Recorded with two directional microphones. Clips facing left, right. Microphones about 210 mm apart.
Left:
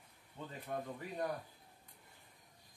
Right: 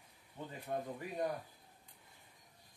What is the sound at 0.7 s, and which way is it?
Speech, 25° right (ahead or behind).